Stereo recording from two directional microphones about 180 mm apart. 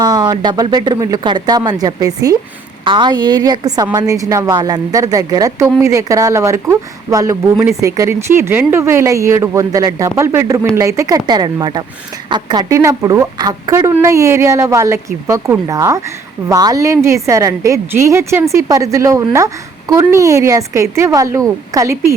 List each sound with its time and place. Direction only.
0.0 s a woman's voice: 20° right (ahead or behind)